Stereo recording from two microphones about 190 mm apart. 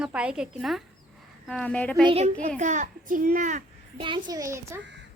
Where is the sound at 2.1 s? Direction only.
30° right (ahead or behind).